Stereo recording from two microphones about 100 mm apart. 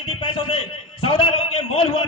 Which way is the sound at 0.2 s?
65° left (ahead or behind).